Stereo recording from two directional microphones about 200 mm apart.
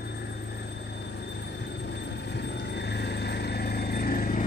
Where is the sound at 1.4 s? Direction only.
60° left (ahead or behind).